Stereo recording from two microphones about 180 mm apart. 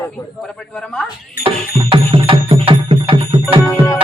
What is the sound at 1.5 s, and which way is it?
Music, 30° right (ahead or behind).